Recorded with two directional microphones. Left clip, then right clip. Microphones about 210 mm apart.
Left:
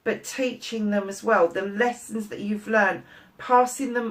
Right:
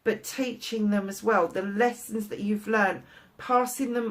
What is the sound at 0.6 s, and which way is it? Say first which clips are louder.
Speech: left 2 dB; 40° right (ahead or behind).